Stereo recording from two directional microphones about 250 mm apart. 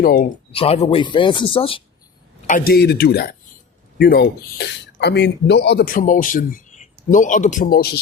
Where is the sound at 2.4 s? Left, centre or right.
Left.